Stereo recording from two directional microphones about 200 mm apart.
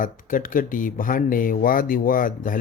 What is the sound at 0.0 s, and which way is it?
Speech, 45° left (ahead or behind).